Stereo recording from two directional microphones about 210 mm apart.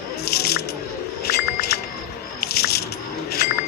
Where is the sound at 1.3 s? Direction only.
50° left (ahead or behind).